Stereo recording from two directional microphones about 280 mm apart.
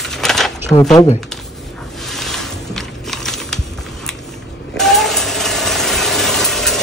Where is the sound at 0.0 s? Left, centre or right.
Centre.